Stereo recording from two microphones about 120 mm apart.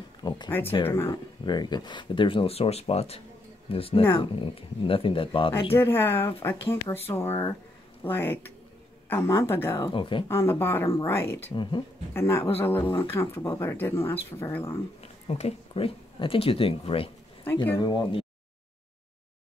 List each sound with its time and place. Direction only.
0.5 s speech: 20° left (ahead or behind)
1.1 s speech: 35° left (ahead or behind)
5.8 s speech: 20° left (ahead or behind)
9.9 s speech: 45° left (ahead or behind)
10.2 s speech: 20° left (ahead or behind)
11.5 s speech: 40° left (ahead or behind)
12.1 s speech: 20° left (ahead or behind)
12.8 s speech: 45° left (ahead or behind)
13.2 s speech: 25° left (ahead or behind)
15.0 s speech: 60° left (ahead or behind)
17.7 s speech: 40° left (ahead or behind)